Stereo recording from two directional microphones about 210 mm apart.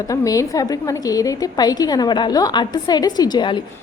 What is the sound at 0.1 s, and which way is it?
A woman's voice, 15° left (ahead or behind).